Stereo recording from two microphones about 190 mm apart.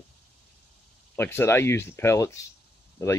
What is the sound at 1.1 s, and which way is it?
Speech, 10° left (ahead or behind).